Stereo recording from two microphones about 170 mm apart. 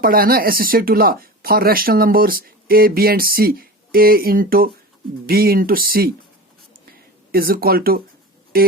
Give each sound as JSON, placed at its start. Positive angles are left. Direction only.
{"t": 0.0, "sound": "speech", "side_deg": -60}
{"t": 7.3, "sound": "speech", "side_deg": -60}